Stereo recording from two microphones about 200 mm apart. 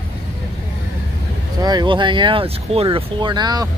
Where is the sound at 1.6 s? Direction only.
20° right (ahead or behind).